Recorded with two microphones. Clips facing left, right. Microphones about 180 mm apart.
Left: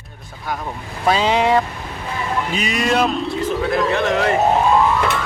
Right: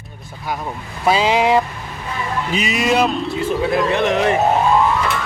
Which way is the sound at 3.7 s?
20° right (ahead or behind).